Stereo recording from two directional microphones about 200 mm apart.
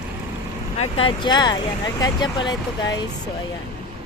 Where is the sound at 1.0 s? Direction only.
25° left (ahead or behind).